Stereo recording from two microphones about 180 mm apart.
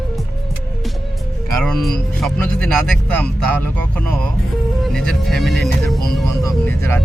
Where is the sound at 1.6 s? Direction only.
Centre (ahead or behind).